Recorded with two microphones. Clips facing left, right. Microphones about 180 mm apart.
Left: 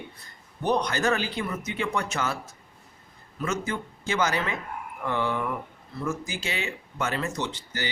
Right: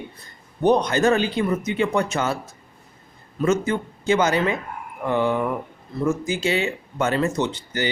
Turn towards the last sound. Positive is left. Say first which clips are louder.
# right 8 dB
turn(degrees=-20)  # may be behind; listen again after turning